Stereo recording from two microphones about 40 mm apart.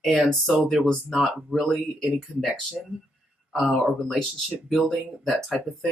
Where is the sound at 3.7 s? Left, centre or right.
Centre.